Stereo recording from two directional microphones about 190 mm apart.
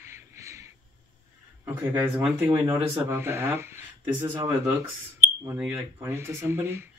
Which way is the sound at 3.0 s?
10° right (ahead or behind).